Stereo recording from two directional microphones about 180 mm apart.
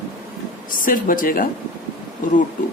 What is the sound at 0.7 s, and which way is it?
Speech, 50° left (ahead or behind).